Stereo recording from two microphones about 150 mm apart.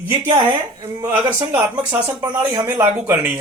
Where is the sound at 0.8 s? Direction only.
20° right (ahead or behind).